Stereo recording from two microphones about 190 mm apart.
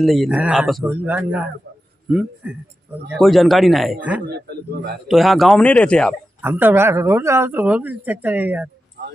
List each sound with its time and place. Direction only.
0.0 s a man's voice: centre (ahead or behind)
4.3 s a man's voice: 55° right (ahead or behind)
5.0 s a man's voice: centre (ahead or behind)
6.4 s speech: 10° right (ahead or behind)